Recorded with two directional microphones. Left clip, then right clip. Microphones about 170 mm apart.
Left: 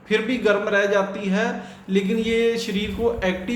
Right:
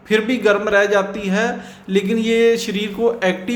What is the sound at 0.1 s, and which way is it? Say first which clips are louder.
A man's voice: right 4 dB; 35° right (ahead or behind).